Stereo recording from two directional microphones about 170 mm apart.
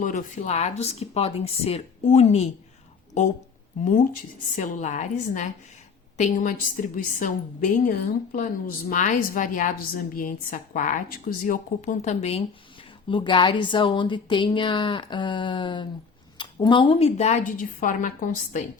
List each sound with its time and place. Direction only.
0.0 s speech: 45° left (ahead or behind)
3.8 s a woman's voice: 50° left (ahead or behind)